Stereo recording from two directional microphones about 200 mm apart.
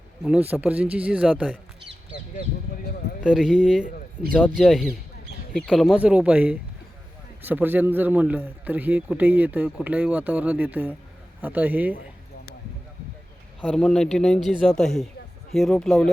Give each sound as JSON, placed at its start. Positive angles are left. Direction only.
{"t": 0.5, "sound": "a man's voice", "side_deg": -5}
{"t": 3.2, "sound": "a man's voice", "side_deg": -5}
{"t": 13.6, "sound": "a man's voice", "side_deg": 0}